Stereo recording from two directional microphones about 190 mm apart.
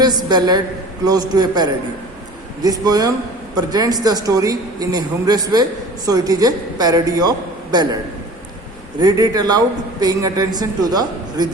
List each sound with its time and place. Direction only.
0.0 s a man's voice: 20° right (ahead or behind)
9.0 s a man's voice: 20° right (ahead or behind)